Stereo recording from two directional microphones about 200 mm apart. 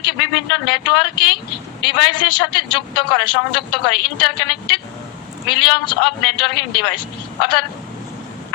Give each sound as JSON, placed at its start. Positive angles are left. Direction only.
{"t": 0.0, "sound": "a man's voice", "side_deg": 25}